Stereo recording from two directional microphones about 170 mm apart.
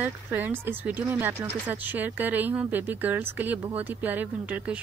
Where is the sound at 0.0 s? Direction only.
10° right (ahead or behind).